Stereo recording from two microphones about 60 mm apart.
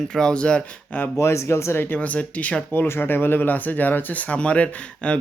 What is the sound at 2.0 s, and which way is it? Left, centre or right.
Speech, left.